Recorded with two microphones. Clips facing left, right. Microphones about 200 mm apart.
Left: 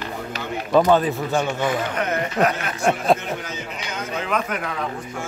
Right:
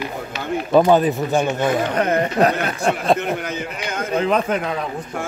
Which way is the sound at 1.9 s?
35° right (ahead or behind).